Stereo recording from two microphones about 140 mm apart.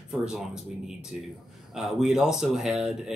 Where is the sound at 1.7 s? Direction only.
5° right (ahead or behind).